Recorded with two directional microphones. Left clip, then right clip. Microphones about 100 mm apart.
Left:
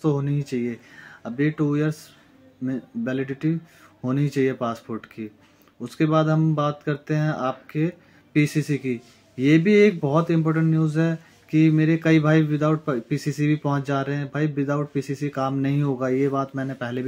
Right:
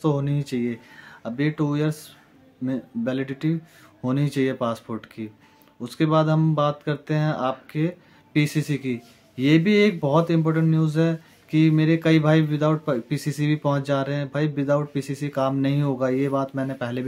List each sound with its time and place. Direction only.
0.0 s speech: 15° right (ahead or behind)